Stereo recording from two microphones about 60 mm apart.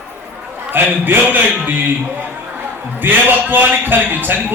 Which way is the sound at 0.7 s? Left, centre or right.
Right.